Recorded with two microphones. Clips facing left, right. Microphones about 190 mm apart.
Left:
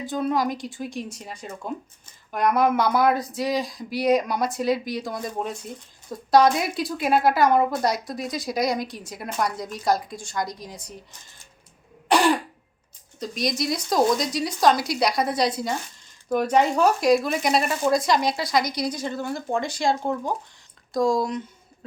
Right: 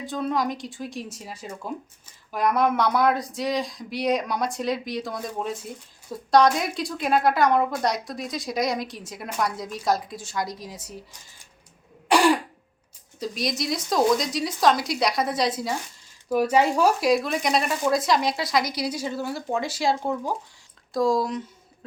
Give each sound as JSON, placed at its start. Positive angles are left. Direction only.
{"t": 0.0, "sound": "speech", "side_deg": 0}
{"t": 12.0, "sound": "cough", "side_deg": -10}
{"t": 13.1, "sound": "speech", "side_deg": 0}